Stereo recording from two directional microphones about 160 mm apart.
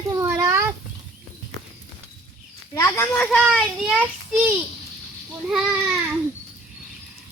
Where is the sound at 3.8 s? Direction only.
10° right (ahead or behind).